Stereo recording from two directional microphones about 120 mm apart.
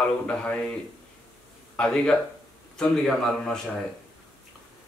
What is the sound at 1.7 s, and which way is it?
Speech, 5° left (ahead or behind).